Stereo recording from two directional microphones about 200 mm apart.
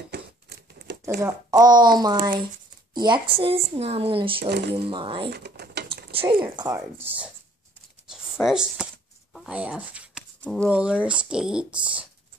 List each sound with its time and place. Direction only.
0.1 s a sound: 55° right (ahead or behind)
1.6 s speech: 20° right (ahead or behind)
4.5 s speech: 55° right (ahead or behind)
4.8 s speech: 25° right (ahead or behind)
5.3 s mechanisms: 55° right (ahead or behind)
6.1 s speech: 25° right (ahead or behind)
8.5 s a sound: 5° right (ahead or behind)
10.4 s speech: 5° left (ahead or behind)
10.7 s speech: 5° right (ahead or behind)